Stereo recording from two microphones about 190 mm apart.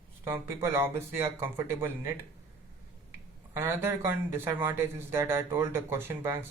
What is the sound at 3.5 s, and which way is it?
Speech, 10° right (ahead or behind).